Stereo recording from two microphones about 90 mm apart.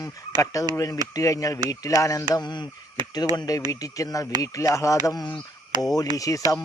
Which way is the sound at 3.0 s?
55° right (ahead or behind).